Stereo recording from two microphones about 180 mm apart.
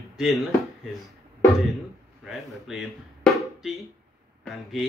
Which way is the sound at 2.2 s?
Centre (ahead or behind).